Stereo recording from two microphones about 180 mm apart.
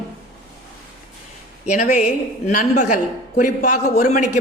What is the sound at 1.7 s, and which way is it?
Speech, 40° left (ahead or behind).